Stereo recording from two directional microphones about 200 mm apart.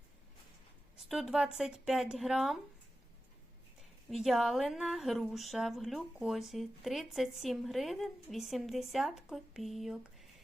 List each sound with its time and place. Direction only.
1.0 s a woman's voice: centre (ahead or behind)
4.1 s a woman's voice: centre (ahead or behind)